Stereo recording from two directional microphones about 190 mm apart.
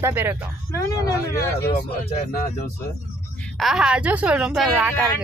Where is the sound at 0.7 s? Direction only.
15° left (ahead or behind).